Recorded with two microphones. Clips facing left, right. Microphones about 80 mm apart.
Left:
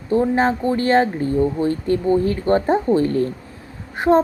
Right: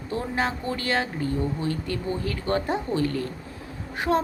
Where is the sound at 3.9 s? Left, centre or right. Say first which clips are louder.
Left 8 dB; left.